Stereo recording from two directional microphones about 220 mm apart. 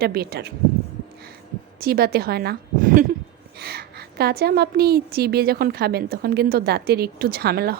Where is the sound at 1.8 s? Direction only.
45° right (ahead or behind).